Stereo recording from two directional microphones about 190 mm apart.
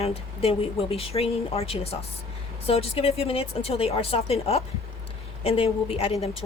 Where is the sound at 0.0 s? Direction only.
30° left (ahead or behind).